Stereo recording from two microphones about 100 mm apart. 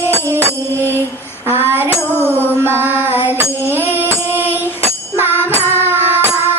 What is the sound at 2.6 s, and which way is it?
Chant, 25° right (ahead or behind).